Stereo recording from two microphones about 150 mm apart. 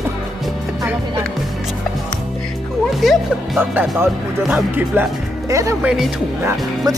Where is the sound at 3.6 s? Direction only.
15° right (ahead or behind).